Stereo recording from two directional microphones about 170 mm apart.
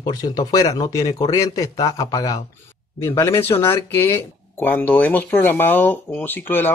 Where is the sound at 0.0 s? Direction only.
25° left (ahead or behind).